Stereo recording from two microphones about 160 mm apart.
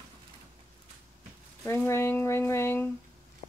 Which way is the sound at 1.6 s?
15° left (ahead or behind).